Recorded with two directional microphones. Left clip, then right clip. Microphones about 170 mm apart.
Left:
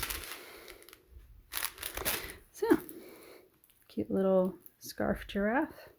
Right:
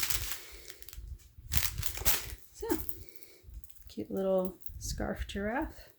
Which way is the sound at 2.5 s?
65° left (ahead or behind).